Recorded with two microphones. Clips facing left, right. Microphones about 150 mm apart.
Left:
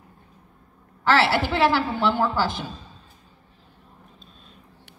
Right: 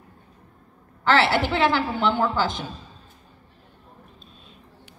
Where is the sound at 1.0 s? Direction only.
20° right (ahead or behind).